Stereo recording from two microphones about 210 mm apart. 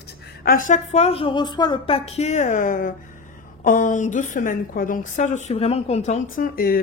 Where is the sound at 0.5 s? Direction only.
40° left (ahead or behind).